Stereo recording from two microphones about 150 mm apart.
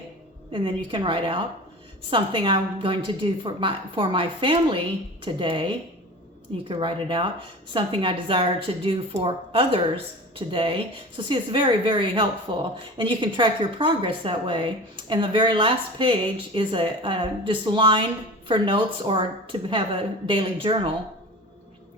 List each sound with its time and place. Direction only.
0.5 s speech: 35° right (ahead or behind)